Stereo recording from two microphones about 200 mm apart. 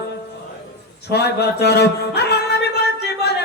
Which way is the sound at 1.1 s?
55° left (ahead or behind).